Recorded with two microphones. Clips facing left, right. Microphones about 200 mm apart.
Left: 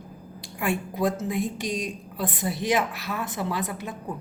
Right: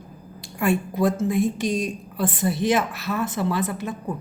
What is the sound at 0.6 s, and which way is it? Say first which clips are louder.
A woman's voice: right 5 dB; 15° left (ahead or behind).